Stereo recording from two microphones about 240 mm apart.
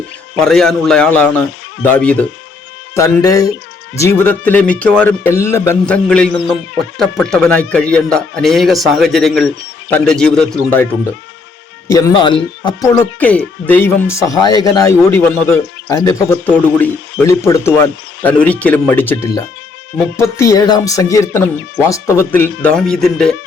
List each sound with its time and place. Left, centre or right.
0.3 s speech: centre
11.9 s speech: centre
12.9 s speech: centre